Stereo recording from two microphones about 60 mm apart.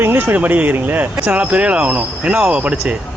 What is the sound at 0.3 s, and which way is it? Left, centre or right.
Speech, right.